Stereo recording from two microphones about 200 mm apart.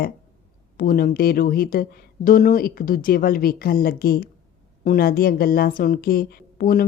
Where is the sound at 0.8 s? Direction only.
45° left (ahead or behind).